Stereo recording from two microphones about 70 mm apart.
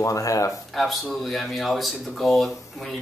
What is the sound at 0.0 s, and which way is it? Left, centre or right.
Speech, left.